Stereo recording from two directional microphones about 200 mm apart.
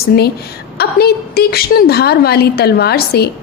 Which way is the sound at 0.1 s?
50° left (ahead or behind).